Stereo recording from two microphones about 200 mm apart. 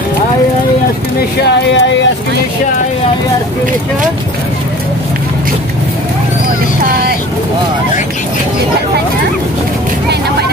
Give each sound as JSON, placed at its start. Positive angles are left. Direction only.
{"t": 1.7, "sound": "speech", "side_deg": 65}